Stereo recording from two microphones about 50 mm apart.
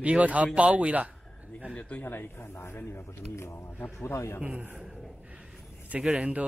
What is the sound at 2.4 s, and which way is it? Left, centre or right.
Speech, left.